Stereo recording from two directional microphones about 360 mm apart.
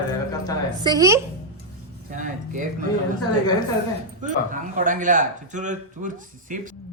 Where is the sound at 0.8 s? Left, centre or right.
Centre.